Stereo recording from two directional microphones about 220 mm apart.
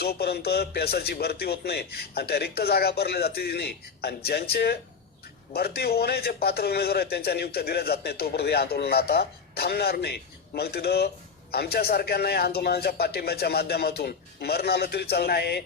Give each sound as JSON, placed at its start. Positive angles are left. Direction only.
{"t": 0.0, "sound": "a man's voice", "side_deg": 45}